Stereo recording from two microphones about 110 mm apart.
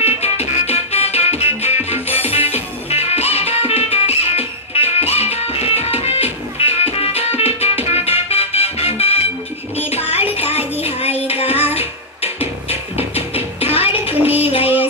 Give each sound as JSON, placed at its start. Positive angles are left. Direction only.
{"t": 0.0, "sound": "music", "side_deg": 75}